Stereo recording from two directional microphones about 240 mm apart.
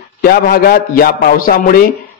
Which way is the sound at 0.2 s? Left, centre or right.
Left.